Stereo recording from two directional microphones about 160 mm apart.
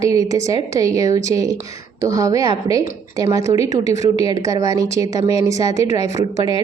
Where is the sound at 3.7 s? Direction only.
45° left (ahead or behind).